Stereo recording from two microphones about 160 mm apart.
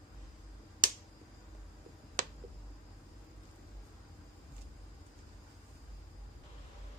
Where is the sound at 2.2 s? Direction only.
55° right (ahead or behind).